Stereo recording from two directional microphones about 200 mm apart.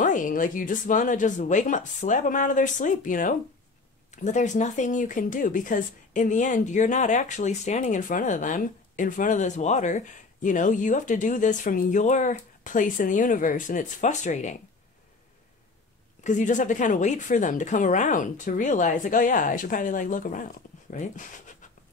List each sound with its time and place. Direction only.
0.0 s speech: 40° left (ahead or behind)
16.3 s speech: 40° left (ahead or behind)